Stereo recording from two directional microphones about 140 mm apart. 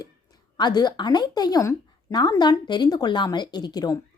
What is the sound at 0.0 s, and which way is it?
A woman's voice, 30° left (ahead or behind).